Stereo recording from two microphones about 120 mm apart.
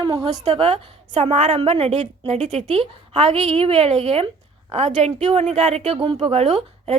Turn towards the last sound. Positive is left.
turn(degrees=-60)  # may be behind; listen again after turning